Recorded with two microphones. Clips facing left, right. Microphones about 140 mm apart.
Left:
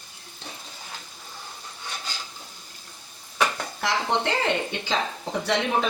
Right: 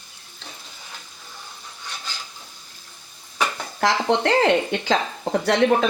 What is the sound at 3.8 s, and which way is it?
Speech, 70° right (ahead or behind).